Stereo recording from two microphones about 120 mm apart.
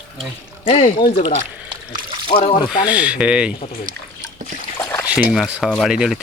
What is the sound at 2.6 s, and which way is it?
Speech, 10° right (ahead or behind).